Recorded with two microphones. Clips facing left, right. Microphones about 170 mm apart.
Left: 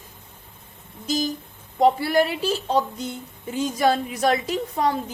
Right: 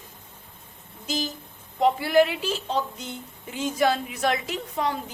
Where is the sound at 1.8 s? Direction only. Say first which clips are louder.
Left 1 dB; 35° left (ahead or behind).